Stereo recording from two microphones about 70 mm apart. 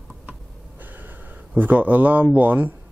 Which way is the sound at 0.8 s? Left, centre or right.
Right.